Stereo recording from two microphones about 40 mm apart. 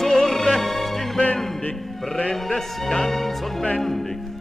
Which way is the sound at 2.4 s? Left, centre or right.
Centre.